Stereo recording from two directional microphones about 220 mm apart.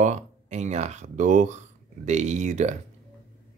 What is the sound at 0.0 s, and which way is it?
Speech, 30° right (ahead or behind).